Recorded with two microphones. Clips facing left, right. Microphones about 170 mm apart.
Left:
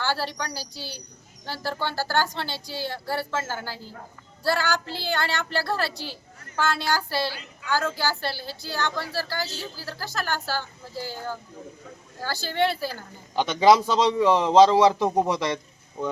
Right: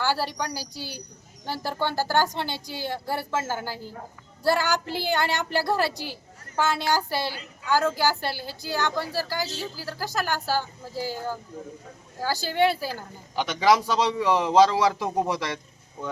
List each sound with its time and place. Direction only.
0.0 s a woman's voice: 10° right (ahead or behind)
10.9 s speech: 45° right (ahead or behind)
12.2 s a woman's voice: 10° right (ahead or behind)
13.4 s a man's voice: 20° left (ahead or behind)